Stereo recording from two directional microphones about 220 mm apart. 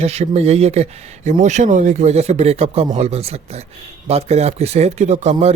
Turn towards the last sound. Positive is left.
turn(degrees=-30)  # may be behind; listen again after turning